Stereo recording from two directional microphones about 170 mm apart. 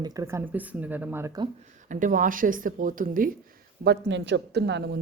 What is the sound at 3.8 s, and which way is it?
A woman's voice, 80° right.